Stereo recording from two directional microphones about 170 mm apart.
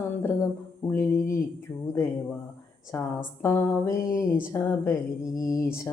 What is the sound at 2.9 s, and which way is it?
Speech, 15° left (ahead or behind).